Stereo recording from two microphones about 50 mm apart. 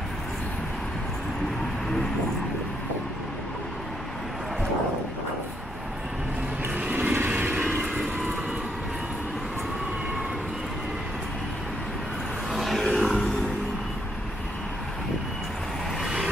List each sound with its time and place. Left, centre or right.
6.9 s vehicle: right
7.2 s vehicle: right
7.8 s vehicle: centre
12.4 s vehicle: centre